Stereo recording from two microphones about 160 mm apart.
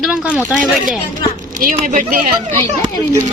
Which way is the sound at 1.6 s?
55° right (ahead or behind).